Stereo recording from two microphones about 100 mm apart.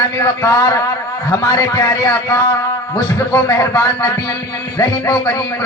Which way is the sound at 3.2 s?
25° left (ahead or behind).